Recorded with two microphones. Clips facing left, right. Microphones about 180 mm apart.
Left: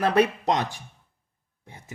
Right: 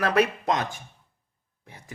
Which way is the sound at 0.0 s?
30° left (ahead or behind).